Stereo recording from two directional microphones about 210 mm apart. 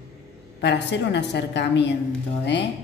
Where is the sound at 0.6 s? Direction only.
55° left (ahead or behind).